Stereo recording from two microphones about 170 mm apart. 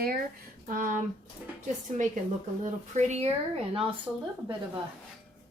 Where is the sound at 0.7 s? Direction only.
50° right (ahead or behind).